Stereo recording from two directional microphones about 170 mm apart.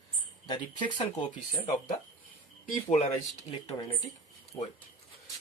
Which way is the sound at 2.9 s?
40° left (ahead or behind).